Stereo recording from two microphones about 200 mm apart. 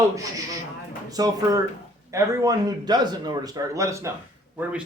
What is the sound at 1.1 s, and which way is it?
Speech, 20° right (ahead or behind).